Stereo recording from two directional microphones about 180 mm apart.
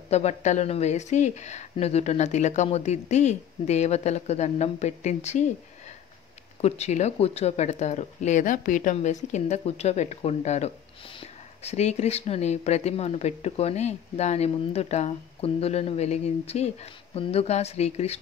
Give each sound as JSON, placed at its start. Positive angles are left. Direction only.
{"t": 0.1, "sound": "speech", "side_deg": 40}